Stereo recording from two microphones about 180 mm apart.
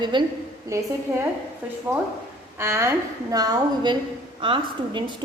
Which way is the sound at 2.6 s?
15° right (ahead or behind).